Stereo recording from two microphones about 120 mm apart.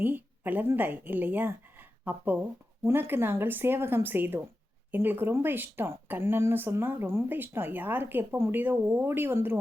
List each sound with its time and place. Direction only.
0.0 s a woman's voice: 15° right (ahead or behind)